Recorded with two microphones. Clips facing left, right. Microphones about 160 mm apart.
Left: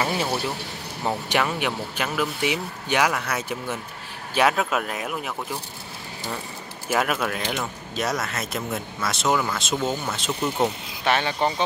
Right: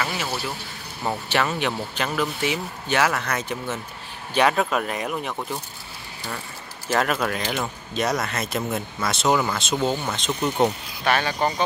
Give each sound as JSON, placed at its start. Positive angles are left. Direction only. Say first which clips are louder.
{"t": 0.0, "sound": "speech", "louder": "left 3 dB", "side_deg": 30}
{"t": 1.3, "sound": "speech", "louder": "right 2 dB", "side_deg": 10}
{"t": 6.9, "sound": "speech", "louder": "right 1 dB", "side_deg": 5}
{"t": 11.1, "sound": "speech", "louder": "even", "side_deg": 25}